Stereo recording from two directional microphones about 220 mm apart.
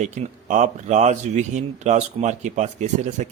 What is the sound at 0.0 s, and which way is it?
Speech, 35° right (ahead or behind).